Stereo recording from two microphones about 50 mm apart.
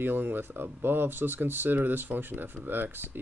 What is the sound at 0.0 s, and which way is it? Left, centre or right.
Speech, right.